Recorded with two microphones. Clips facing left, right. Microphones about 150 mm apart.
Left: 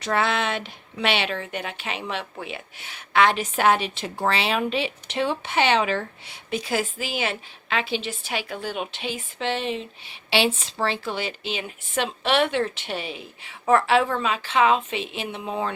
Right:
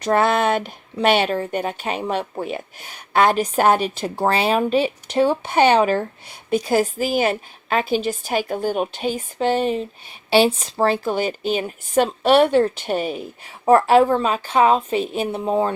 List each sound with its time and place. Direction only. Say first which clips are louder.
0.0 s a woman's voice: right 6 dB; 45° right (ahead or behind)